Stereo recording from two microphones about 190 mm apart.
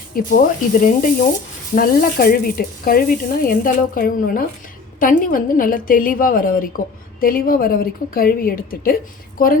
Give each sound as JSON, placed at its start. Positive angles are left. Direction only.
{"t": 0.2, "sound": "speech", "side_deg": 45}